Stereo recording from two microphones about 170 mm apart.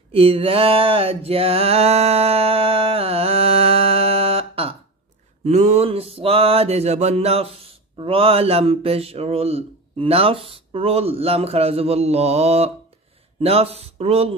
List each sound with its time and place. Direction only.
0.1 s mantra: 35° right (ahead or behind)